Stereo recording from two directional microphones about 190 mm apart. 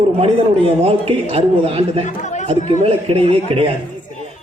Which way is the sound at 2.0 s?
40° left (ahead or behind).